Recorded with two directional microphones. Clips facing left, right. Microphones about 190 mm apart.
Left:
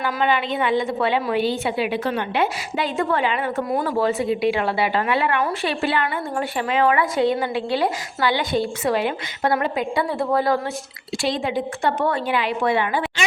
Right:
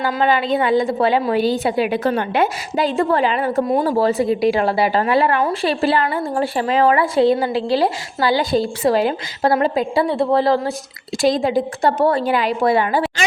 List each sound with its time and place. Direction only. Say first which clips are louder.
0.0 s a woman's voice: right 4 dB; 35° right (ahead or behind)
11.2 s a woman's voice: right 7 dB; 40° right (ahead or behind)